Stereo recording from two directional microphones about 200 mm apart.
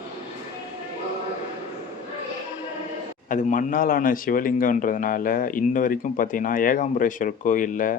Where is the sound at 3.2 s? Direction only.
40° left (ahead or behind).